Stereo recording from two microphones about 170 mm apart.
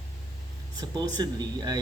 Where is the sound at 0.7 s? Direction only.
25° right (ahead or behind).